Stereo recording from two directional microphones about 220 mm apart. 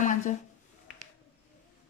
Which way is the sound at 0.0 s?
35° left (ahead or behind).